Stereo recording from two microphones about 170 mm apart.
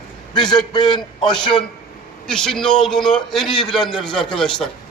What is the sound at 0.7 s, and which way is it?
Speech, 25° left (ahead or behind).